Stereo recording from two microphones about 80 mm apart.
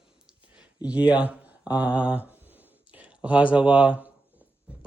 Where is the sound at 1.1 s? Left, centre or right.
Centre.